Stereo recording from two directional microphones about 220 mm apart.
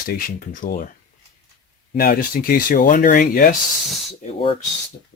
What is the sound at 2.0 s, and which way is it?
Speech, 40° left (ahead or behind).